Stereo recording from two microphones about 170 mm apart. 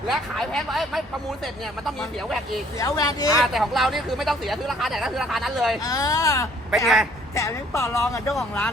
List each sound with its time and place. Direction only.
0.1 s speech: centre (ahead or behind)
2.7 s speech: 20° left (ahead or behind)
3.3 s speech: centre (ahead or behind)
5.8 s speech: 20° left (ahead or behind)
6.8 s speech: centre (ahead or behind)
7.3 s speech: 15° left (ahead or behind)